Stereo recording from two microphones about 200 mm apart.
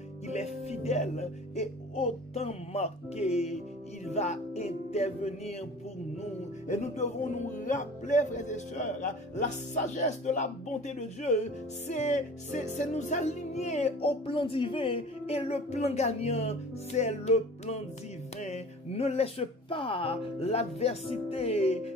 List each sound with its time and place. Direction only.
0.3 s music: 30° left (ahead or behind)
6.7 s music: 35° left (ahead or behind)
18.4 s speech: 30° left (ahead or behind)